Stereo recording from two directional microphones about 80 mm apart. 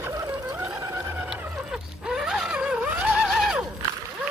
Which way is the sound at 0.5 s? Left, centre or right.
Right.